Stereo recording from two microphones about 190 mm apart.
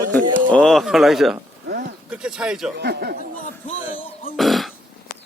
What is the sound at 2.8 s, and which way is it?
Speech, 60° right (ahead or behind).